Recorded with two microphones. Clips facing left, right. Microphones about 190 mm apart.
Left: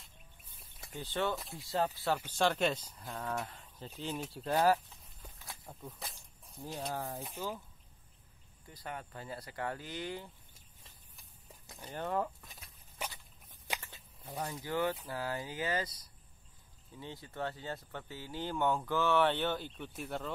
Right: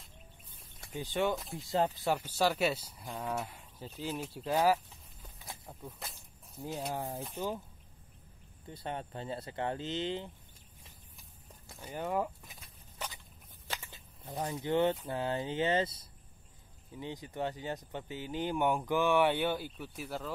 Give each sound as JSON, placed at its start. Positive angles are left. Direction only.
{"t": 0.9, "sound": "speech", "side_deg": -15}
{"t": 6.6, "sound": "speech", "side_deg": -15}
{"t": 8.6, "sound": "speech", "side_deg": -25}
{"t": 11.8, "sound": "speech", "side_deg": -10}
{"t": 13.0, "sound": "a sound", "side_deg": 10}
{"t": 13.7, "sound": "a sound", "side_deg": -10}
{"t": 15.0, "sound": "speech", "side_deg": -25}